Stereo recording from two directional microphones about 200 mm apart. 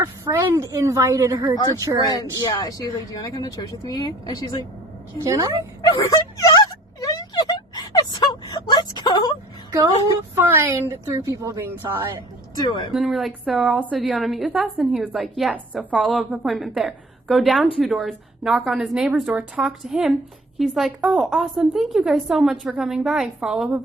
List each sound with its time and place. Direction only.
0.0 s a woman's voice: 15° right (ahead or behind)
2.4 s speech: 20° left (ahead or behind)
5.2 s a woman's voice: 15° right (ahead or behind)
5.9 s a sound: 20° left (ahead or behind)
10.3 s a woman's voice: 10° right (ahead or behind)
12.5 s speech: 20° left (ahead or behind)
12.9 s a woman's voice: centre (ahead or behind)